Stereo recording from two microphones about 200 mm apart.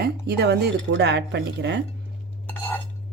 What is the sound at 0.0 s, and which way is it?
Speech, 55° right (ahead or behind).